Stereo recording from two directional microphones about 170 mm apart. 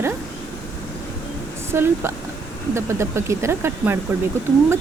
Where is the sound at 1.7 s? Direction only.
15° right (ahead or behind).